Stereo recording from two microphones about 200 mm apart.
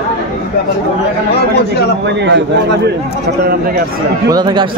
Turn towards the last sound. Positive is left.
turn(degrees=-20)  # may be behind; listen again after turning